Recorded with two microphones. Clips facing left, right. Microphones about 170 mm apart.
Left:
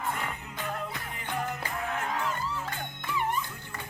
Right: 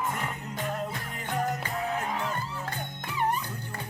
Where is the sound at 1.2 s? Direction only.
40° right (ahead or behind).